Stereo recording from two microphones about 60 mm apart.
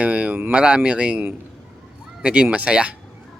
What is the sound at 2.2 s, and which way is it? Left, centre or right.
Speech, centre.